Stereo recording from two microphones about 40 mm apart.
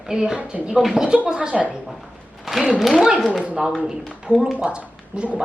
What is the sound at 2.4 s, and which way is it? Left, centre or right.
Speech, centre.